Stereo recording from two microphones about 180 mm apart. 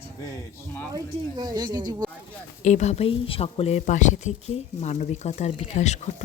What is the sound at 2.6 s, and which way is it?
Speech, 40° left (ahead or behind).